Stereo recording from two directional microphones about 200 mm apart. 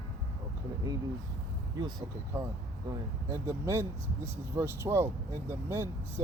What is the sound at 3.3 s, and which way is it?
Speech, 15° right (ahead or behind).